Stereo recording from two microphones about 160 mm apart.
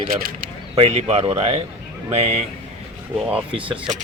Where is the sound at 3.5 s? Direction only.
35° right (ahead or behind).